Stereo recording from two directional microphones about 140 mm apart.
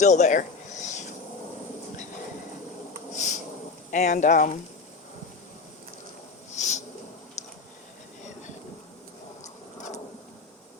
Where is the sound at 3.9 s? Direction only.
65° left (ahead or behind).